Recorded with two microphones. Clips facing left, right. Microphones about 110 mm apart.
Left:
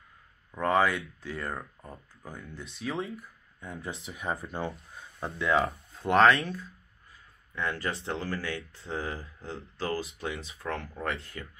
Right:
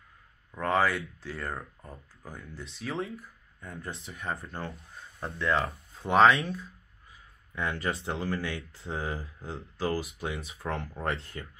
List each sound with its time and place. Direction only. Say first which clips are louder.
0.5 s speech: left 1 dB; centre (ahead or behind)
7.5 s speech: right 1 dB; 20° right (ahead or behind)